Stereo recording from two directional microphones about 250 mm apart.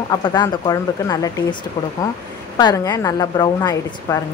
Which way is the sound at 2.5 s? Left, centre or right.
Centre.